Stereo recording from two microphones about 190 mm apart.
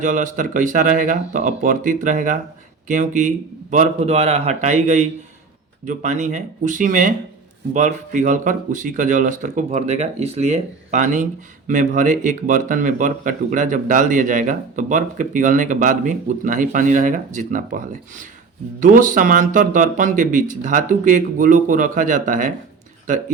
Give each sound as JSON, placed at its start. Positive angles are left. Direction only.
{"t": 0.0, "sound": "speech", "side_deg": -40}